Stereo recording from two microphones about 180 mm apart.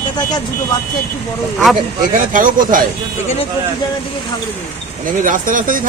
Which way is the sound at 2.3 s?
50° right (ahead or behind).